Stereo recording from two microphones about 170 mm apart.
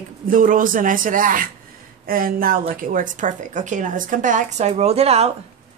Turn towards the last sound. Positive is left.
turn(degrees=-35)  # may be behind; listen again after turning